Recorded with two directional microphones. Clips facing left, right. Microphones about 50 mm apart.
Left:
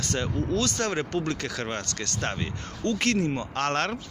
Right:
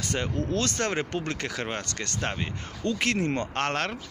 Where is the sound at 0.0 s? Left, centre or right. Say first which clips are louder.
Left 1 dB; centre.